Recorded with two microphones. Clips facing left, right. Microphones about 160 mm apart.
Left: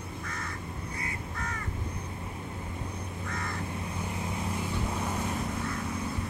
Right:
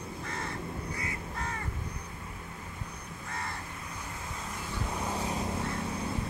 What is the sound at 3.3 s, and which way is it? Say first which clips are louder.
Crow: left 1 dB; 30° right (ahead or behind).